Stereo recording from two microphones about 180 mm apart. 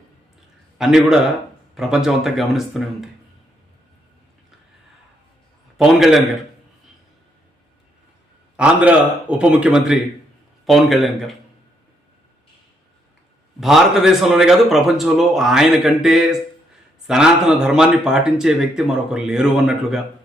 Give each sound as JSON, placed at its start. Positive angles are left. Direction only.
{"t": 0.8, "sound": "speech", "side_deg": -5}
{"t": 5.7, "sound": "speech", "side_deg": 0}
{"t": 8.5, "sound": "a man's voice", "side_deg": -5}
{"t": 13.6, "sound": "speech", "side_deg": 0}